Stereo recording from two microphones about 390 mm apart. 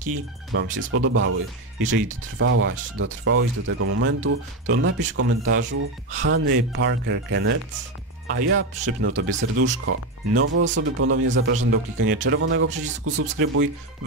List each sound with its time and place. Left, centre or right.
0.5 s speech: right
2.3 s speech: right